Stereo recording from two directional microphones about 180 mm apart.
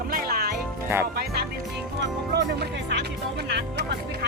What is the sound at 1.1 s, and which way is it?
Speech, 60° right (ahead or behind).